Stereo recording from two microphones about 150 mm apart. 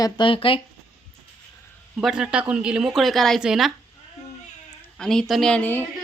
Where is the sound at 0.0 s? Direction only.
35° left (ahead or behind).